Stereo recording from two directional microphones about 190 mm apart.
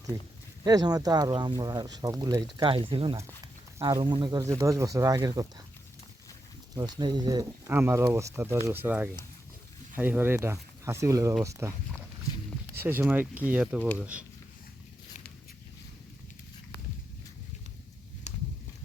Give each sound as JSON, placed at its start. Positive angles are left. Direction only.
{"t": 0.6, "sound": "speech", "side_deg": -20}
{"t": 6.7, "sound": "speech", "side_deg": -20}
{"t": 12.8, "sound": "speech", "side_deg": -10}
{"t": 18.3, "sound": "a sound", "side_deg": 35}